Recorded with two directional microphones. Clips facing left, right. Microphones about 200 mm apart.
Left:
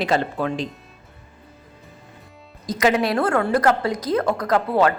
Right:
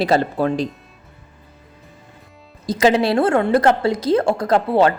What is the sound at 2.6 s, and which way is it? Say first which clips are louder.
A woman's voice: right 4 dB; 30° right (ahead or behind).